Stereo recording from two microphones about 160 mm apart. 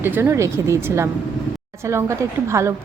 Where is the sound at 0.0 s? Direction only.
15° right (ahead or behind).